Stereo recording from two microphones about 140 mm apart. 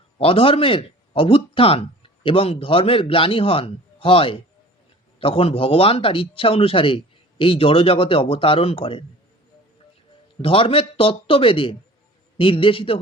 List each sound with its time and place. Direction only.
0.2 s speech: 40° left (ahead or behind)
10.4 s speech: 40° left (ahead or behind)